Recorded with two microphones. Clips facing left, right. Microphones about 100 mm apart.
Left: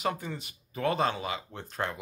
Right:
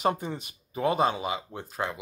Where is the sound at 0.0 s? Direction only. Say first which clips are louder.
Right 5 dB; 25° right (ahead or behind).